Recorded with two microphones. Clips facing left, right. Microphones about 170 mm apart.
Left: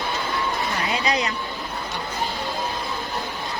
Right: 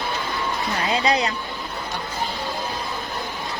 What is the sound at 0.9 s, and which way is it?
Speech, 30° right (ahead or behind).